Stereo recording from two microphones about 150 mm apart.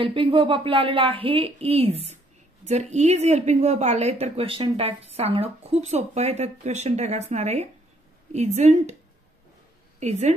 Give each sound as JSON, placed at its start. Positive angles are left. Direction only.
{"t": 0.0, "sound": "a woman's voice", "side_deg": -35}
{"t": 9.9, "sound": "a woman's voice", "side_deg": -50}